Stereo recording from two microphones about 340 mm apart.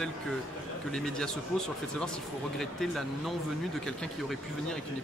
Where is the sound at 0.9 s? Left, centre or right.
Centre.